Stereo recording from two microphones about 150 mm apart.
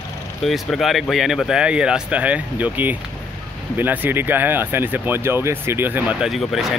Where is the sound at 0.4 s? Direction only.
Centre (ahead or behind).